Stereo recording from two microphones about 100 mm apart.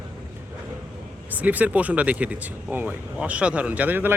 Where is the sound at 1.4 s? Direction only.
15° right (ahead or behind).